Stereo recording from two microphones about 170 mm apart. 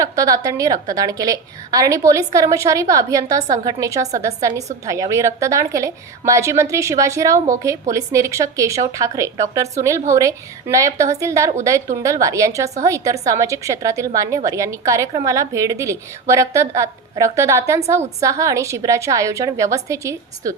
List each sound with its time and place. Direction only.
0.0 s a woman's voice: 20° right (ahead or behind)